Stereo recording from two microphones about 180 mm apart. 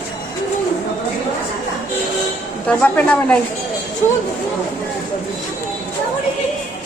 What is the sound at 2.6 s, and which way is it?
Speech, 10° left (ahead or behind).